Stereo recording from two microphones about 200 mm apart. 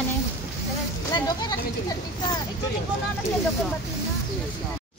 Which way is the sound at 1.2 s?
20° left (ahead or behind).